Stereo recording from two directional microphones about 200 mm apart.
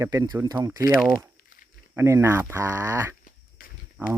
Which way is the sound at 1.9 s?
15° right (ahead or behind).